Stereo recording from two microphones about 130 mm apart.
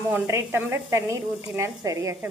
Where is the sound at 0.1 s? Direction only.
20° right (ahead or behind).